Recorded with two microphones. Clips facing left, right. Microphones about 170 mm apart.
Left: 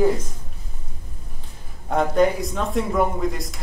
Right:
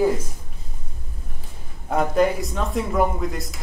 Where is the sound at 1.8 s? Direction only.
Centre (ahead or behind).